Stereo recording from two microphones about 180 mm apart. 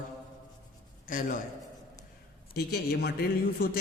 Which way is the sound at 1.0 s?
50° left (ahead or behind).